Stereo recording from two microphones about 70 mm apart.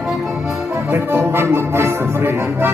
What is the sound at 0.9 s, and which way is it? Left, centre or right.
Music, right.